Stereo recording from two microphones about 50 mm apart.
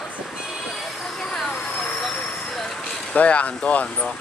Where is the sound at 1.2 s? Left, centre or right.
Centre.